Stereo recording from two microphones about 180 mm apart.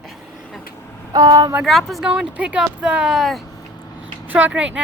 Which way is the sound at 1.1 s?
20° right (ahead or behind).